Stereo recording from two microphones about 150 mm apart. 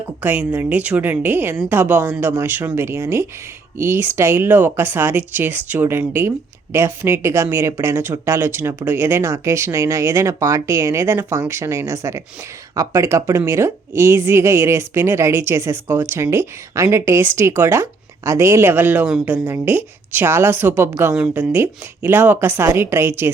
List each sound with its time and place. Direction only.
0.2 s a woman's voice: 10° right (ahead or behind)
21.2 s speech: 5° right (ahead or behind)
21.5 s a woman's voice: 15° right (ahead or behind)